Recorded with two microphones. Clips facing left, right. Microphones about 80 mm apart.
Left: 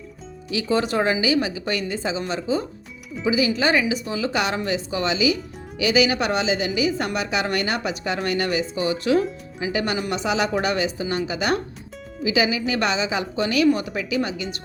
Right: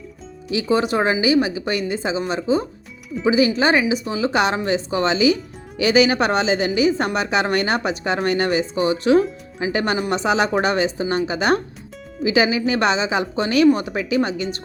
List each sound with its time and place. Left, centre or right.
0.5 s speech: centre
3.2 s a woman's voice: right
3.5 s a woman's voice: right
13.9 s a woman's voice: right